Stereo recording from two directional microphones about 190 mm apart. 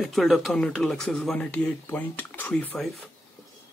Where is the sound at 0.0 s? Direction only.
Centre (ahead or behind).